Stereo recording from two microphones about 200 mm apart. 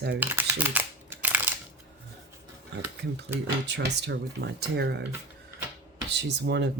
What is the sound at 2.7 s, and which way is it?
Speech, 60° right (ahead or behind).